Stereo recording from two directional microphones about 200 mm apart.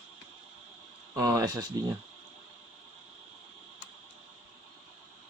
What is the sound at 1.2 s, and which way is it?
Speech, 15° right (ahead or behind).